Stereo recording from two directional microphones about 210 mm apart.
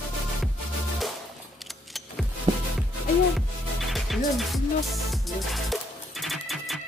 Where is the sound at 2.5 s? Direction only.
20° right (ahead or behind).